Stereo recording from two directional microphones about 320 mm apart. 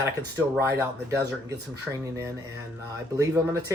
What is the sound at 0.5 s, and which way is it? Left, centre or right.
Speech, centre.